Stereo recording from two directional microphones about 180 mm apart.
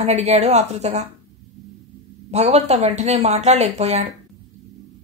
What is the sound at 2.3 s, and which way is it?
A woman's voice, 35° right (ahead or behind).